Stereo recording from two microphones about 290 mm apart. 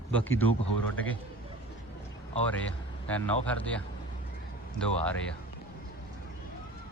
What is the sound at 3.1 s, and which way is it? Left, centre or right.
Speech, centre.